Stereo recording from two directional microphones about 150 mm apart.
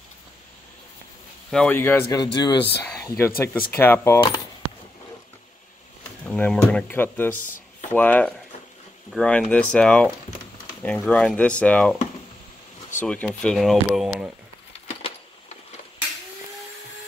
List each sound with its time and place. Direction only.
1.5 s speech: 10° left (ahead or behind); by 2.6 s 25° left (ahead or behind)
3.1 s speech: 15° left (ahead or behind)
6.2 s speech: 10° left (ahead or behind)
7.3 s speech: 60° left (ahead or behind)
7.9 s speech: 10° left (ahead or behind)
13.0 s speech: 5° left (ahead or behind)
14.7 s a sound: 40° left (ahead or behind)